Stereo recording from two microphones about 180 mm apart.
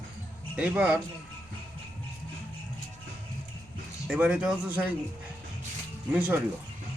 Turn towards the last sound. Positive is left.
turn(degrees=-10)  # may be behind; listen again after turning